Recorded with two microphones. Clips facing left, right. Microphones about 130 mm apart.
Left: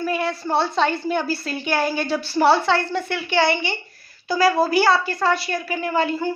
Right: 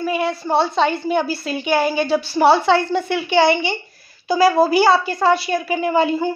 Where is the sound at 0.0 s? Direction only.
20° right (ahead or behind).